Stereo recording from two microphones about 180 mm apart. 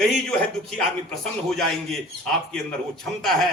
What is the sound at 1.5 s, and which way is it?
A man's voice, centre (ahead or behind).